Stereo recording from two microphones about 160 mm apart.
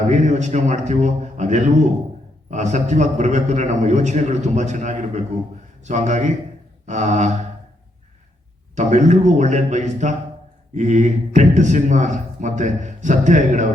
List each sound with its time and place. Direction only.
0.1 s a man's voice: 50° right (ahead or behind)
8.7 s a man's voice: 50° right (ahead or behind)